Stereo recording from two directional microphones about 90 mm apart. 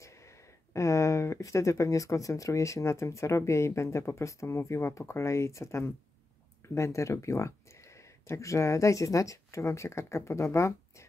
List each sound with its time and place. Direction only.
0.0 s speech: 35° left (ahead or behind)